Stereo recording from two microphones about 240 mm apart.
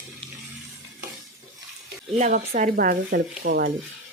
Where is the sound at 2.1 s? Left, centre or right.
Right.